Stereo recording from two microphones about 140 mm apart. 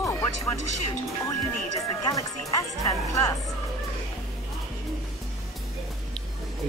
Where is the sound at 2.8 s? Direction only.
25° left (ahead or behind).